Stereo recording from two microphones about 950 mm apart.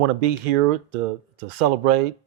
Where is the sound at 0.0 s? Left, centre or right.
Right.